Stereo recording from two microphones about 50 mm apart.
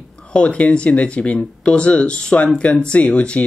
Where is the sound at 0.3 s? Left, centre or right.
Left.